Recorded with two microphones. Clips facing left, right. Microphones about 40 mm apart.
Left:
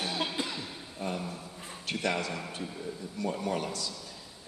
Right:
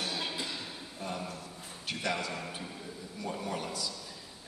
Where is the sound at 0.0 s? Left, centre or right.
Centre.